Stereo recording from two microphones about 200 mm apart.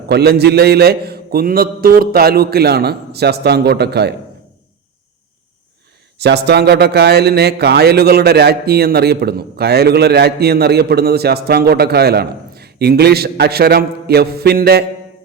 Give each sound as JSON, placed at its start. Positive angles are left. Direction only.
{"t": 0.1, "sound": "speech", "side_deg": -55}
{"t": 6.1, "sound": "speech", "side_deg": -55}